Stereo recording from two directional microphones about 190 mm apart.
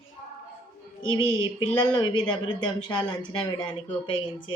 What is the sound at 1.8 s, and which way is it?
Speech, 25° left (ahead or behind).